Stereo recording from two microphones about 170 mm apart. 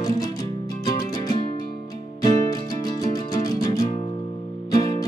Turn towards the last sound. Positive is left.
turn(degrees=25)  # may be behind; listen again after turning